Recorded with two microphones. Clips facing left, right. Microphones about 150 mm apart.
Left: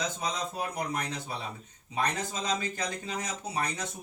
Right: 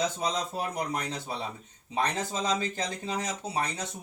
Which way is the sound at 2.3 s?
30° right (ahead or behind).